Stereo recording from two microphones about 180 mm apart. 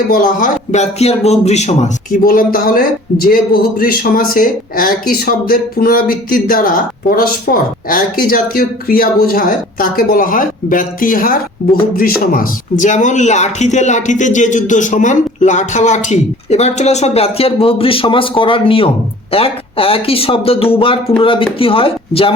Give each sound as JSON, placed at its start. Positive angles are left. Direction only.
{"t": 0.1, "sound": "speech", "side_deg": 50}
{"t": 2.2, "sound": "a man's voice", "side_deg": 55}